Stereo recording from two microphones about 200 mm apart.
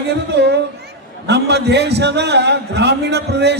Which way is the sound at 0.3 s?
60° right (ahead or behind).